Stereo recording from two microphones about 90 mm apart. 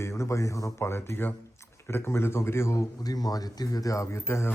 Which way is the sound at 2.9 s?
45° left (ahead or behind).